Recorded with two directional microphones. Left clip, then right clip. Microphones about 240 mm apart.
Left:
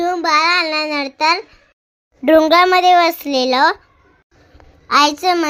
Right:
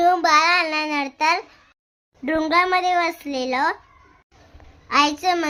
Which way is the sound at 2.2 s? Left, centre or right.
Centre.